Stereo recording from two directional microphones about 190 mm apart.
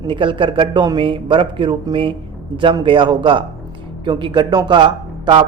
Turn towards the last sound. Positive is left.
turn(degrees=-25)  # may be behind; listen again after turning